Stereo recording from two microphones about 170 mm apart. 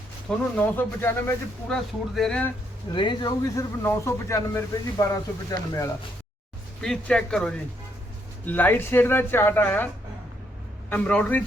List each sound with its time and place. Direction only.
0.3 s speech: 10° left (ahead or behind)
2.9 s speech: 25° left (ahead or behind)
6.8 s speech: 5° left (ahead or behind)